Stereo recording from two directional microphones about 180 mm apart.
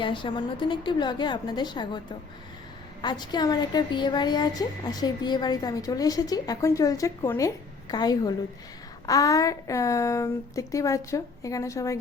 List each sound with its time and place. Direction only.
0.0 s a woman's voice: 25° left (ahead or behind)
3.0 s a woman's voice: 25° left (ahead or behind)